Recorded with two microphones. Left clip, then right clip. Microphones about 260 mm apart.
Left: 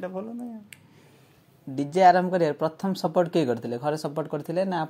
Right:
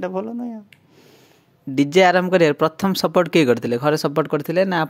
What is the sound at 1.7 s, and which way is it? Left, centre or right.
Speech, right.